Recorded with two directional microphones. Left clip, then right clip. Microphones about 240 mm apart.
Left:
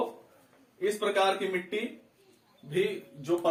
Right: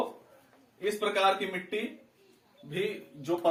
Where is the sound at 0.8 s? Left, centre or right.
Centre.